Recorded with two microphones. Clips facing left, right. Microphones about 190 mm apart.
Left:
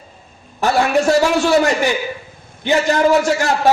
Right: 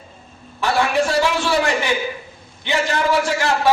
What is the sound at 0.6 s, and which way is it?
A man's voice, 45° left (ahead or behind).